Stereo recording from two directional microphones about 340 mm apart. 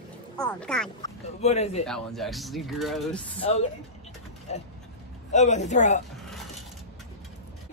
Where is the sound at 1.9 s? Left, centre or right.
Centre.